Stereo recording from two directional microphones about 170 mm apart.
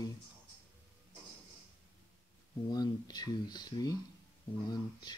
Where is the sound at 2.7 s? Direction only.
25° left (ahead or behind).